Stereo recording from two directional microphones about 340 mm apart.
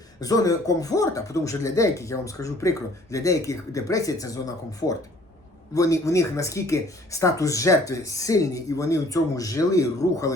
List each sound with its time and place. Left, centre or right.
0.2 s speech: centre